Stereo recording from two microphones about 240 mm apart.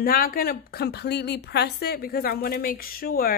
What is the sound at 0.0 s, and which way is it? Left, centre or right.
A woman's voice, left.